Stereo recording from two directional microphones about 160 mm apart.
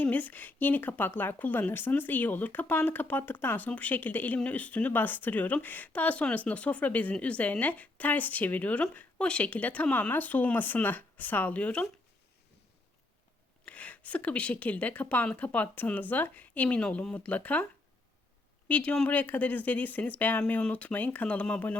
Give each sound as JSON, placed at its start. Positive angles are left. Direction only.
{"t": 0.0, "sound": "a woman's voice", "side_deg": 10}
{"t": 13.7, "sound": "a woman's voice", "side_deg": 10}
{"t": 18.7, "sound": "a woman's voice", "side_deg": 10}